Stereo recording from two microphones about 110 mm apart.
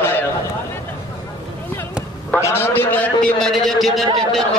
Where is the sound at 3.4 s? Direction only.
Centre (ahead or behind).